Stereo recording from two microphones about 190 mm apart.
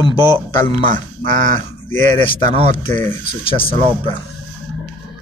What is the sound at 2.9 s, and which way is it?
Speech, 10° left (ahead or behind).